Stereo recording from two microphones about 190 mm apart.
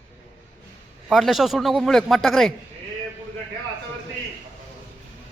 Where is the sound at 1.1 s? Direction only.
Centre (ahead or behind).